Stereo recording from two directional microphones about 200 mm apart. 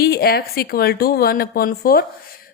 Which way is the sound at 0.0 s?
50° left (ahead or behind).